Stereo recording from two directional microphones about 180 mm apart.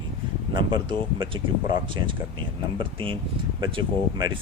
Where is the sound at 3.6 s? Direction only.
25° right (ahead or behind).